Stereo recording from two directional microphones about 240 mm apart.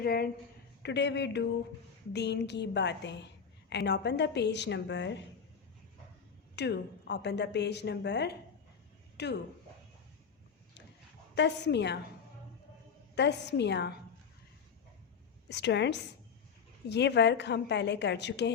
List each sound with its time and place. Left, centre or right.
0.0 s a woman's voice: left
6.6 s a woman's voice: left
11.3 s a woman's voice: left
13.1 s a woman's voice: left
15.4 s a woman's voice: left